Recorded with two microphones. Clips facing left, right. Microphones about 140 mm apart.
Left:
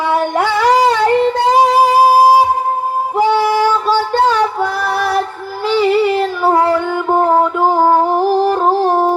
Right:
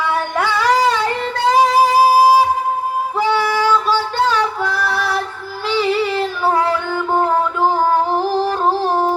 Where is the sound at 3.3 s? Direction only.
50° left (ahead or behind).